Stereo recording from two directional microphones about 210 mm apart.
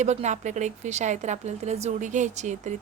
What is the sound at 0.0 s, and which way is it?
A woman's voice, 35° right (ahead or behind).